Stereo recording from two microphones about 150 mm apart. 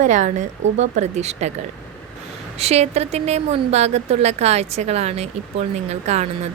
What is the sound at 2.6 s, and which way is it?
Speech, 45° right (ahead or behind).